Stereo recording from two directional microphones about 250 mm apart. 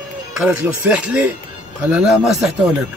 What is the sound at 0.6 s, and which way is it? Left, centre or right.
Speech, centre.